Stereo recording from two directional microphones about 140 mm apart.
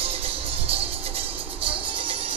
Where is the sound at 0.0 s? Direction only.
45° right (ahead or behind).